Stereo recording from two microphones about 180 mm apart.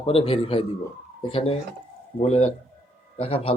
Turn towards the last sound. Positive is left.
turn(degrees=30)  # may be behind; listen again after turning